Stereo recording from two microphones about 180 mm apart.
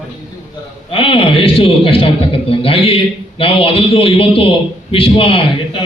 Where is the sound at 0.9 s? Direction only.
30° left (ahead or behind).